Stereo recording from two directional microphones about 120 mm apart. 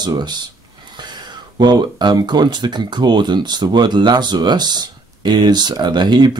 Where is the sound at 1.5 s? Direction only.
35° right (ahead or behind).